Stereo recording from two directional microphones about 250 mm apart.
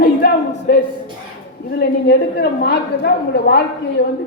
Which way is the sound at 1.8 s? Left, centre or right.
Left.